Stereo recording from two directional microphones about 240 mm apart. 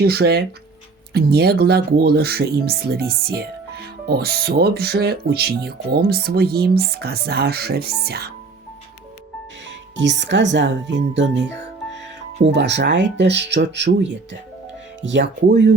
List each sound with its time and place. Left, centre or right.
0.0 s speech: right
9.9 s speech: right